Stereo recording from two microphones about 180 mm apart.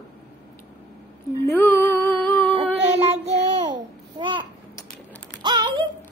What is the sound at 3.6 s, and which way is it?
Speech, 25° right (ahead or behind).